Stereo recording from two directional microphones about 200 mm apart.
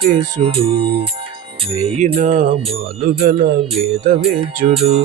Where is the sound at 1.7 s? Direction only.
30° right (ahead or behind).